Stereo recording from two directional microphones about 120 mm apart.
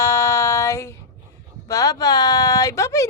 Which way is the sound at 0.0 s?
20° left (ahead or behind).